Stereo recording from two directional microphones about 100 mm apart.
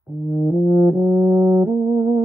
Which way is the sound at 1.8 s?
40° right (ahead or behind).